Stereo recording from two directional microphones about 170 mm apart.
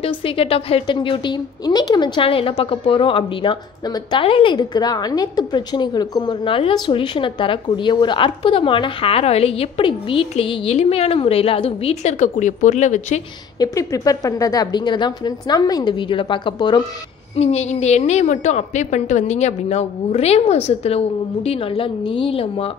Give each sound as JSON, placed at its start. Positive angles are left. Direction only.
{"t": 0.0, "sound": "speech", "side_deg": 35}
{"t": 13.6, "sound": "a woman's voice", "side_deg": 20}
{"t": 17.4, "sound": "speech", "side_deg": 40}